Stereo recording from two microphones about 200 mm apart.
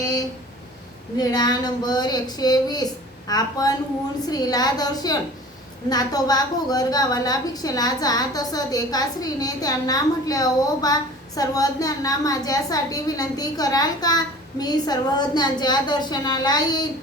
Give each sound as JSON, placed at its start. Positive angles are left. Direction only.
{"t": 1.2, "sound": "a woman's voice", "side_deg": 20}